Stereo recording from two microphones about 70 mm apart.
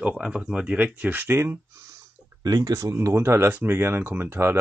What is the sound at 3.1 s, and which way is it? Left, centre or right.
Speech, right.